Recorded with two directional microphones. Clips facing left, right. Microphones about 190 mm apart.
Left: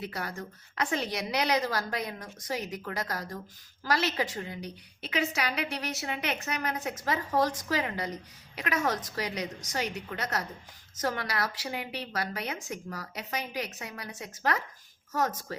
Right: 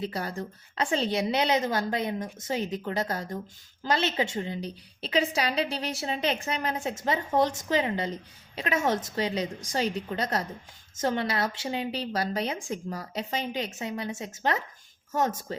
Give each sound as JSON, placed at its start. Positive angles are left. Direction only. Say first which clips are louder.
{"t": 0.0, "sound": "a woman's voice", "louder": "right 4 dB", "side_deg": -30}